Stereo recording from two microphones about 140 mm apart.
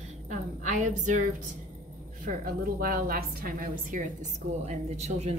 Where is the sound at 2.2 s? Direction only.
90° right.